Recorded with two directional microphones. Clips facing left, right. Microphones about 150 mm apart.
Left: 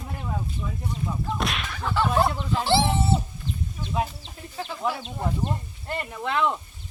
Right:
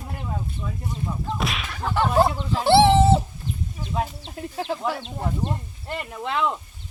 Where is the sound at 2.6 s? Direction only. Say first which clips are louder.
Right 8 dB; 70° right (ahead or behind); by 3.2 s 90° right.